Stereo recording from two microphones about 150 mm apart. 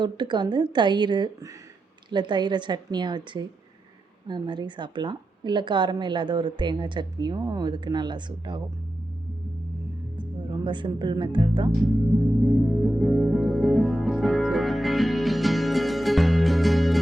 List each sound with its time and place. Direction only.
0.0 s a woman's voice: 30° right (ahead or behind)
10.2 s speech: 30° right (ahead or behind)
12.4 s music: centre (ahead or behind)